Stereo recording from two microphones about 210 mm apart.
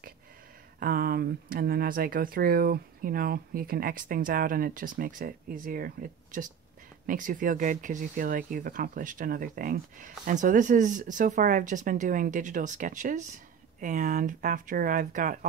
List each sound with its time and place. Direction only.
0.7 s speech: 45° right (ahead or behind)